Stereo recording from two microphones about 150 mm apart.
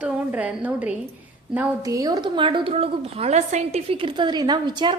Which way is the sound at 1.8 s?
25° right (ahead or behind).